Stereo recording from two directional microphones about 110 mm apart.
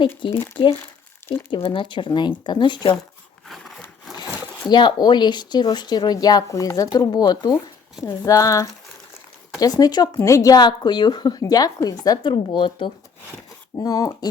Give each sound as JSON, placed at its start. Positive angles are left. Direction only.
{"t": 0.2, "sound": "speech", "side_deg": 50}
{"t": 1.5, "sound": "speech", "side_deg": 60}
{"t": 4.7, "sound": "speech", "side_deg": 45}
{"t": 13.7, "sound": "speech", "side_deg": 35}